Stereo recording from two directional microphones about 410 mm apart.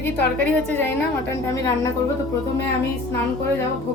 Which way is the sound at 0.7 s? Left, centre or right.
Centre.